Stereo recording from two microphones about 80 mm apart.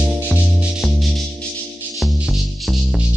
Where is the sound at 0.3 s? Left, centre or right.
Centre.